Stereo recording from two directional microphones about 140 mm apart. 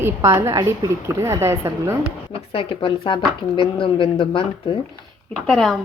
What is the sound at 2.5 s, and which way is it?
Speech, 40° left (ahead or behind).